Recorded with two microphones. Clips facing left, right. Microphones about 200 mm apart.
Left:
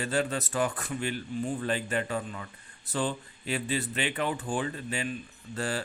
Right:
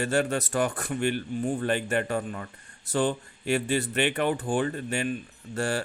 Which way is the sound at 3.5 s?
50° right (ahead or behind).